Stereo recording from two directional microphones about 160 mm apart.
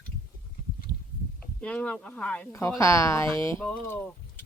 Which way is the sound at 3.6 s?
10° left (ahead or behind).